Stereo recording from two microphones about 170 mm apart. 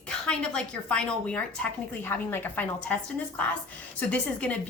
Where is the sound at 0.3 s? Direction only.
5° left (ahead or behind).